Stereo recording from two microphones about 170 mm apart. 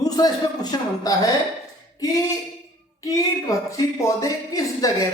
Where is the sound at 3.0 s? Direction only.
20° left (ahead or behind).